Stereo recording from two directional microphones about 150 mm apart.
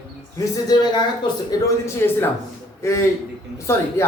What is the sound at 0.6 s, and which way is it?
A man's voice, 30° left (ahead or behind).